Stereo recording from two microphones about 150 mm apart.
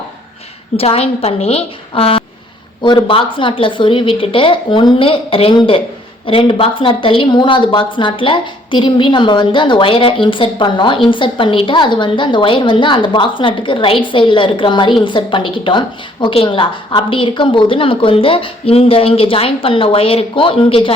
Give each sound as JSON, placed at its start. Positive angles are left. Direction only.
{"t": 0.8, "sound": "a woman's voice", "side_deg": 40}